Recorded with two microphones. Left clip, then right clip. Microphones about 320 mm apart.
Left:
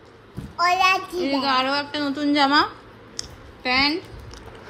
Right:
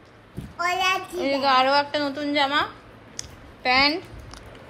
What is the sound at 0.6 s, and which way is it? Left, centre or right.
Child singing, left.